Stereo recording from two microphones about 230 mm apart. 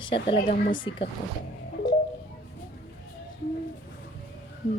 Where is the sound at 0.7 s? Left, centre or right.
Left.